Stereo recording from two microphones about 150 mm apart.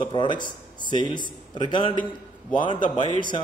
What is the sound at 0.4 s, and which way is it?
A man's voice, 30° left (ahead or behind).